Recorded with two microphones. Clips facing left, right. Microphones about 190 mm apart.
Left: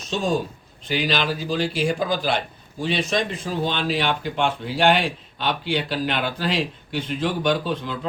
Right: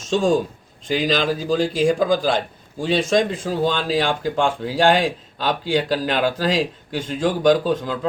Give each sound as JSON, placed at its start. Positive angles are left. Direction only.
{"t": 0.1, "sound": "speech", "side_deg": -45}